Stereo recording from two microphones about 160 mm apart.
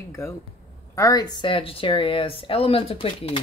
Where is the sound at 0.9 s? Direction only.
20° left (ahead or behind).